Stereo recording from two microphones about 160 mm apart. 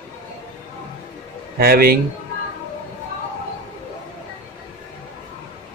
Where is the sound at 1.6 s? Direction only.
70° right (ahead or behind).